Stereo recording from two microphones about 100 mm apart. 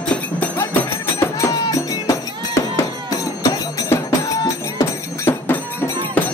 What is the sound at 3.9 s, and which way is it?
Music, 30° left (ahead or behind).